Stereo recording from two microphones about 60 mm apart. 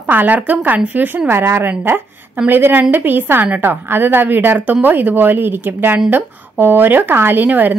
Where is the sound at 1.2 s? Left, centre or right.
Right.